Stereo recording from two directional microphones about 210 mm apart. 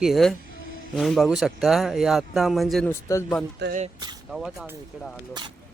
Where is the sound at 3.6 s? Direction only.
55° right (ahead or behind).